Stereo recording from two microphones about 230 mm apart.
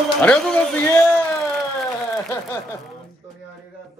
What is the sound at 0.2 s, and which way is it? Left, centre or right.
A man's voice, centre.